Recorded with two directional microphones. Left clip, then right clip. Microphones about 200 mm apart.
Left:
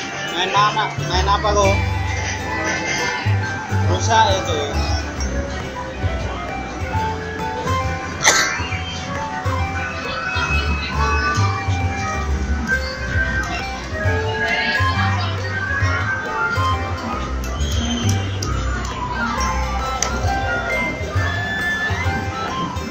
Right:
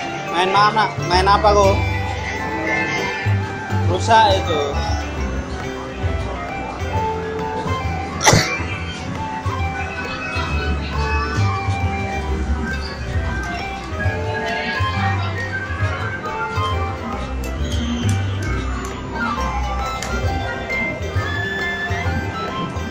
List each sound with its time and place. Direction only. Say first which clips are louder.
0.4 s speech: right 2 dB; 30° right (ahead or behind)
4.1 s speech: right 2 dB; 25° right (ahead or behind)
8.2 s music: right 1 dB; 35° right (ahead or behind)